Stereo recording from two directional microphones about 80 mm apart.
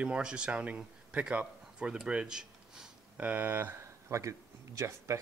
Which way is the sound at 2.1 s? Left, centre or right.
Centre.